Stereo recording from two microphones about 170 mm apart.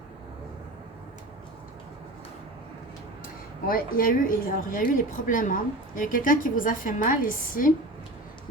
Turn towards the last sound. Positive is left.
turn(degrees=55)  # may be behind; listen again after turning